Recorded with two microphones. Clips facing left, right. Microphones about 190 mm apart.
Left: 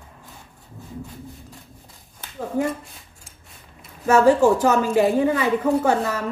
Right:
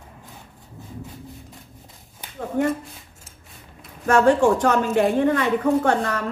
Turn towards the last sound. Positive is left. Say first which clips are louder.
# even
turn(degrees=5)  # may be behind; listen again after turning